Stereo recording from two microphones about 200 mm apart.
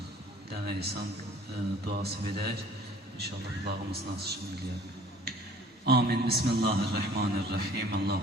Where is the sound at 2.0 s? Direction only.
55° right (ahead or behind).